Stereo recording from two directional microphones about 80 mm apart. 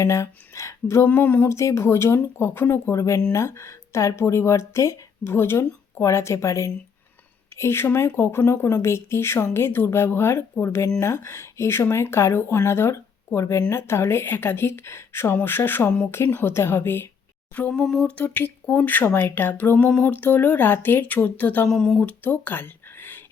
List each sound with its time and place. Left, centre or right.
0.0 s speech: left
1.0 s speech: left
1.5 s speech: left
2.9 s speech: left
17.7 s speech: centre
18.2 s speech: left
21.7 s speech: centre
22.0 s speech: left